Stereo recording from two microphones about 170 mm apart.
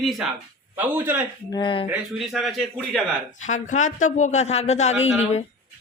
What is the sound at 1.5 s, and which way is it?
Speech, 25° left (ahead or behind).